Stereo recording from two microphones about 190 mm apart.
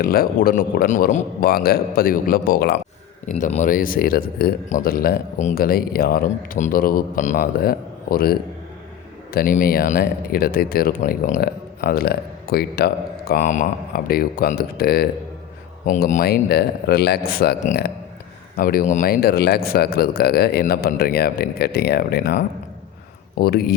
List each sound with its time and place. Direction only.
0.0 s speech: 50° left (ahead or behind)
3.3 s speech: 40° left (ahead or behind)
15.9 s speech: 40° left (ahead or behind)